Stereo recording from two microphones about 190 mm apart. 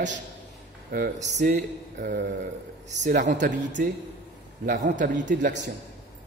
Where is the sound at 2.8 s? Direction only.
40° right (ahead or behind).